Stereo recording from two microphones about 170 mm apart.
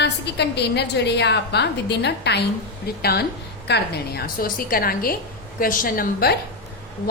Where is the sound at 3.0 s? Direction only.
65° left (ahead or behind).